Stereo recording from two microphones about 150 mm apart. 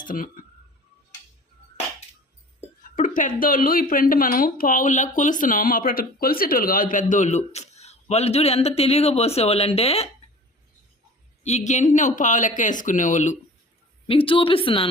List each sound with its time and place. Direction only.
0.0 s speech: 65° left (ahead or behind)
2.9 s a sound: 60° left (ahead or behind)
3.4 s speech: 70° left (ahead or behind); by 10.1 s 45° left (ahead or behind)
11.4 s speech: 50° left (ahead or behind)
14.1 s speech: 35° left (ahead or behind)